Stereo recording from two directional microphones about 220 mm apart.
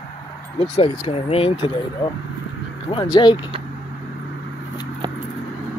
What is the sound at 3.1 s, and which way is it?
Speech, 20° left (ahead or behind).